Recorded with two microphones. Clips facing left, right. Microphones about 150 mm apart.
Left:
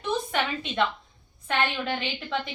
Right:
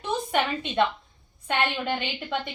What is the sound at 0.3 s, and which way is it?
A woman's voice, 15° right (ahead or behind).